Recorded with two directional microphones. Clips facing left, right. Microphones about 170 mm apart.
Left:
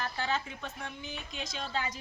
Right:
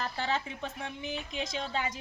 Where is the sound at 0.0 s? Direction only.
30° right (ahead or behind).